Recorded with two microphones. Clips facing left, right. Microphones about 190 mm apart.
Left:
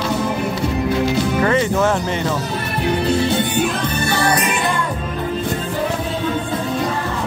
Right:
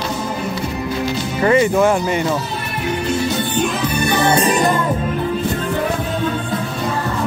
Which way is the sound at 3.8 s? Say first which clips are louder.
Right 2 dB; 15° right (ahead or behind).